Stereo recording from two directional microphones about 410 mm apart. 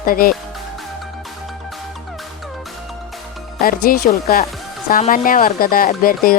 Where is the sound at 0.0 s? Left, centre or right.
Left.